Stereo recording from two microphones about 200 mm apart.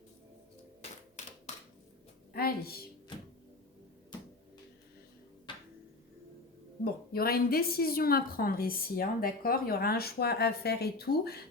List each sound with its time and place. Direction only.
2.3 s a woman's voice: 50° left (ahead or behind)
5.5 s a sound: 25° left (ahead or behind)
6.8 s a woman's voice: 50° left (ahead or behind)